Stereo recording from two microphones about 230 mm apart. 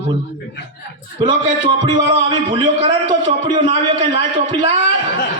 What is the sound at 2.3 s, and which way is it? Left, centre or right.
A man's voice, right.